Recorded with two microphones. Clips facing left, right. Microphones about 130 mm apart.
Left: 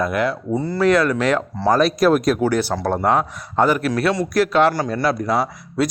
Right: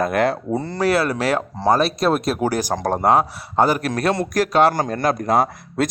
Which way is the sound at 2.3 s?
40° right (ahead or behind).